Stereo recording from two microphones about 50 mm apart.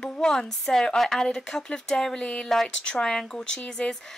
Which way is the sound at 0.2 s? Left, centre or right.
Centre.